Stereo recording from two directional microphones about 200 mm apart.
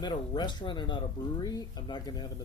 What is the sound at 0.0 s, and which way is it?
Speech, 20° left (ahead or behind).